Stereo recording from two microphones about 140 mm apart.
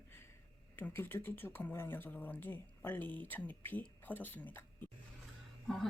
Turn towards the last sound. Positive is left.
turn(degrees=0)  # may be behind; listen again after turning